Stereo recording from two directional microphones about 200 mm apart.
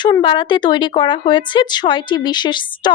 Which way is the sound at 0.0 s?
25° left (ahead or behind).